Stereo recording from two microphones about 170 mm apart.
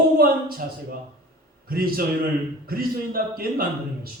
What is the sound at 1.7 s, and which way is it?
A man's voice, 60° right (ahead or behind).